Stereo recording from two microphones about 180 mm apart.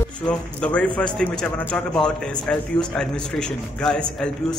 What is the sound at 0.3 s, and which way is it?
A man's voice, 5° left (ahead or behind).